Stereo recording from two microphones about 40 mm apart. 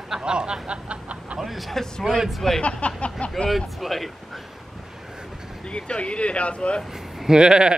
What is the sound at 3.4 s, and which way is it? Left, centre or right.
Speech, centre.